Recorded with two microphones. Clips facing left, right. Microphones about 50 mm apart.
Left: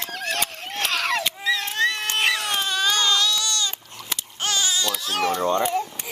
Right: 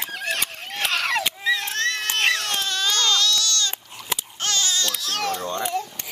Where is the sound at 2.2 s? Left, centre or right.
Centre.